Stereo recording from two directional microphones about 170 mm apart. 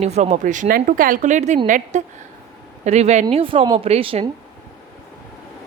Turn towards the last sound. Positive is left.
turn(degrees=-30)  # may be behind; listen again after turning